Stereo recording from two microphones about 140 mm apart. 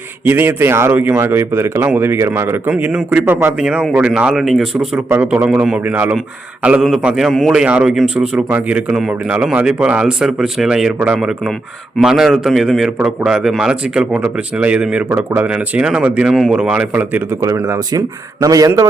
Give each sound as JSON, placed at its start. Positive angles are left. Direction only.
{"t": 0.3, "sound": "a man's voice", "side_deg": -15}
{"t": 5.0, "sound": "a man's voice", "side_deg": -10}